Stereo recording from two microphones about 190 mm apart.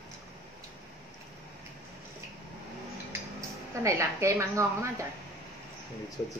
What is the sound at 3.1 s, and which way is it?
Speech, 15° right (ahead or behind).